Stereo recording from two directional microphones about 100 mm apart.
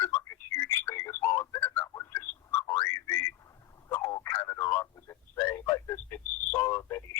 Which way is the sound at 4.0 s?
35° left (ahead or behind).